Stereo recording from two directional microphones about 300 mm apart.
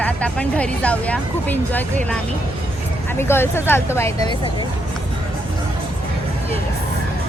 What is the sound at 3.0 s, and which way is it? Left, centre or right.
Speech, centre.